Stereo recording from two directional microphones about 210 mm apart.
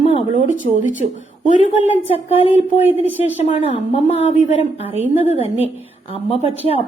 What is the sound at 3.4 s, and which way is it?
A woman's voice, 30° left (ahead or behind).